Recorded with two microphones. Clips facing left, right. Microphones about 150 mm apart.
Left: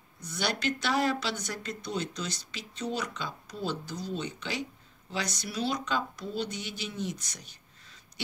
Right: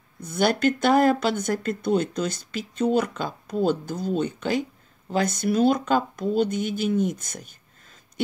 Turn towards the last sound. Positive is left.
turn(degrees=-50)  # may be behind; listen again after turning